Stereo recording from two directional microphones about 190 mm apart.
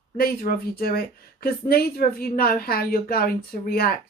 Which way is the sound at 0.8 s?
55° left (ahead or behind).